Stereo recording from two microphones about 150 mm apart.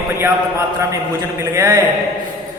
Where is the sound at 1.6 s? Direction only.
20° right (ahead or behind).